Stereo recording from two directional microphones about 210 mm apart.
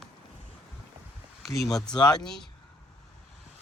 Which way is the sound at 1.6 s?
Centre (ahead or behind).